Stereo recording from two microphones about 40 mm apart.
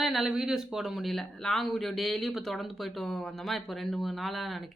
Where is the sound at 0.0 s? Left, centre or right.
Centre.